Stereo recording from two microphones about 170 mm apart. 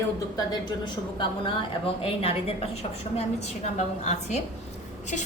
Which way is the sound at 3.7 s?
40° left (ahead or behind).